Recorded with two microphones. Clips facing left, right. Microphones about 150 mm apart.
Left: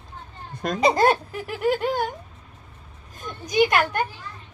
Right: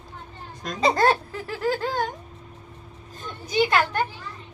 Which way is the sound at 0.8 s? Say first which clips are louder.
Left 1 dB; 15° left (ahead or behind).